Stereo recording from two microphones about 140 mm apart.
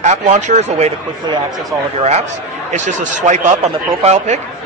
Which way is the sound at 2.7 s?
60° right (ahead or behind).